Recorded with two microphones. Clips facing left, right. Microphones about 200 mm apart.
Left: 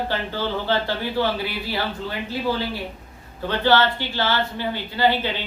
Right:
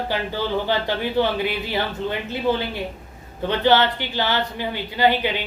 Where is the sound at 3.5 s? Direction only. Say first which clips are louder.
Right 1 dB; 20° right (ahead or behind).